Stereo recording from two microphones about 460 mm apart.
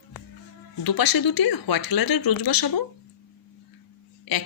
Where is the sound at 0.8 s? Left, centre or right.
Left.